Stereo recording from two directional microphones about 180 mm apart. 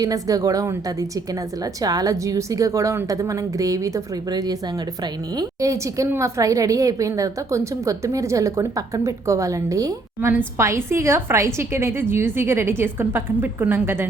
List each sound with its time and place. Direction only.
0.0 s a woman's voice: 20° right (ahead or behind)